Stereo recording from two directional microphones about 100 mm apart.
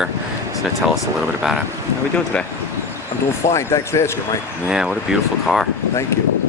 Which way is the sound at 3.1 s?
65° left (ahead or behind).